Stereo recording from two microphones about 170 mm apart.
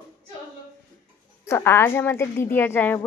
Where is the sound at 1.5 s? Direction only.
15° left (ahead or behind).